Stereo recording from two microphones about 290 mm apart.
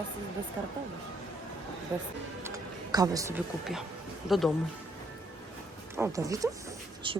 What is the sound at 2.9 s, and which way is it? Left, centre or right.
A woman's voice, centre.